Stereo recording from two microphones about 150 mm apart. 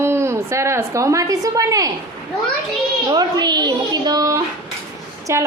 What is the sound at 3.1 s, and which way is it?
Speech, 30° right (ahead or behind).